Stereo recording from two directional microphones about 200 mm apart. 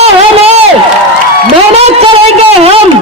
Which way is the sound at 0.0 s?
30° right (ahead or behind).